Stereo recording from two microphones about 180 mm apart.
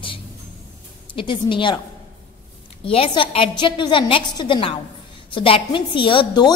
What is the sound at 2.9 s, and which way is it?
A woman's voice, 30° left (ahead or behind).